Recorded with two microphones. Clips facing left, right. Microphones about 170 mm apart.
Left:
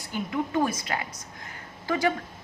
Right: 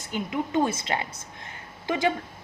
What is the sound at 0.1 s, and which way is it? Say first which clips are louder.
A woman's voice: right 1 dB; 20° right (ahead or behind).